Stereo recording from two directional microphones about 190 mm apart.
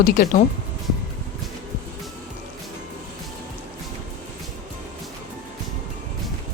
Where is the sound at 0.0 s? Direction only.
50° left (ahead or behind).